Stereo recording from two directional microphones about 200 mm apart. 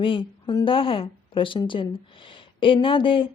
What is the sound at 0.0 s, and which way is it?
A woman's voice, 25° left (ahead or behind).